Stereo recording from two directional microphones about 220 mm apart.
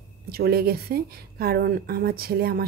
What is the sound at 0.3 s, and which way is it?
A woman's voice, 45° right (ahead or behind).